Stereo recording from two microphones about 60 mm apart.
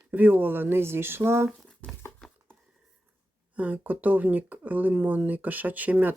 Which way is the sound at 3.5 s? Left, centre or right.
Right.